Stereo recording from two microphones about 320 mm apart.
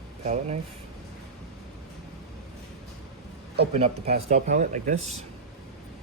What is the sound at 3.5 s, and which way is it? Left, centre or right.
Speech, right.